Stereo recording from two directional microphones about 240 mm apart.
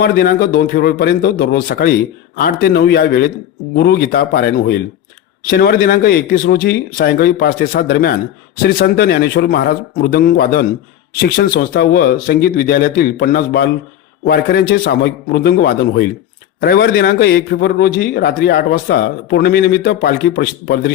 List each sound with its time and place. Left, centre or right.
0.0 s a man's voice: left